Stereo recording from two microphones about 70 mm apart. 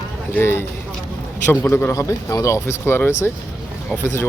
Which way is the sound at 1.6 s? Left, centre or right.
Left.